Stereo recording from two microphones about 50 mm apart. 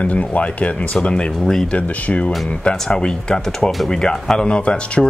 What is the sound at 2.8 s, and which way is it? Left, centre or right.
Speech, centre.